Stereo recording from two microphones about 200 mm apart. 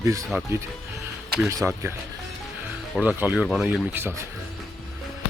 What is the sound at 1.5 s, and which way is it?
Speech, 15° right (ahead or behind).